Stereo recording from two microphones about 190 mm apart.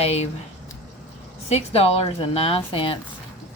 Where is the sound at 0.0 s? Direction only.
35° left (ahead or behind).